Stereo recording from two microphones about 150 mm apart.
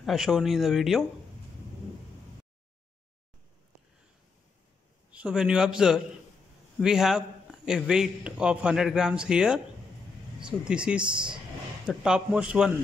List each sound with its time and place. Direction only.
0.0 s a man's voice: centre (ahead or behind)
5.1 s a man's voice: 5° right (ahead or behind)
11.0 s speech: 30° right (ahead or behind)
11.8 s a man's voice: 5° right (ahead or behind)